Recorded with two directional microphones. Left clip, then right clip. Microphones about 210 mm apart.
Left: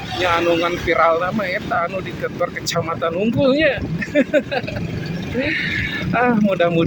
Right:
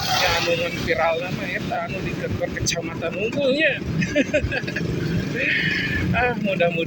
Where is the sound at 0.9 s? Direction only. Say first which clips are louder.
Left 5 dB; 25° left (ahead or behind).